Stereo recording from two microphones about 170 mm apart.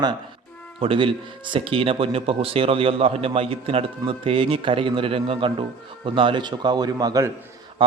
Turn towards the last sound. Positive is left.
turn(degrees=-20)  # may be behind; listen again after turning